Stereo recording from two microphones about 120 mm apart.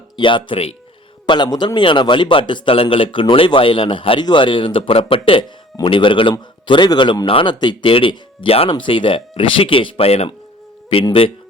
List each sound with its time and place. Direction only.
0.2 s a man's voice: 40° left (ahead or behind)
1.3 s a man's voice: 40° left (ahead or behind)